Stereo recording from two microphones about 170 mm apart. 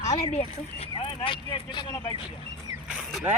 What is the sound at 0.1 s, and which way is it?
Speech, 35° left (ahead or behind).